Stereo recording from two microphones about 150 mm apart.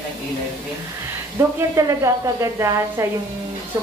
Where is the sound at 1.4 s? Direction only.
15° right (ahead or behind).